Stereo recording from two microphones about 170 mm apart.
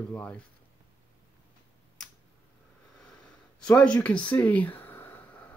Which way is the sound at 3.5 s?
5° left (ahead or behind).